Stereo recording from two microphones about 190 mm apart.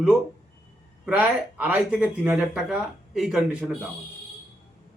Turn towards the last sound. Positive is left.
turn(degrees=-5)  # may be behind; listen again after turning